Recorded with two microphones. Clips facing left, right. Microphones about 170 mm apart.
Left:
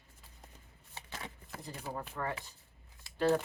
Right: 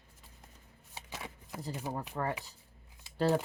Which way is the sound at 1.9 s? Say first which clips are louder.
Right 1 dB; 35° right (ahead or behind).